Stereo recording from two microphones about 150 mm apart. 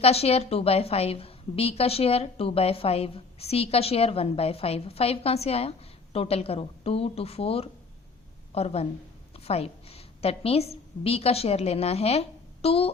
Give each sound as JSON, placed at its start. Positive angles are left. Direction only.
{"t": 0.0, "sound": "a woman's voice", "side_deg": 40}